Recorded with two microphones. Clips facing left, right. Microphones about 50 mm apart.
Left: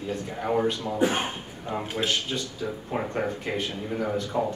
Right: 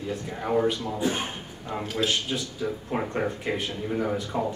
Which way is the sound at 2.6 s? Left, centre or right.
Centre.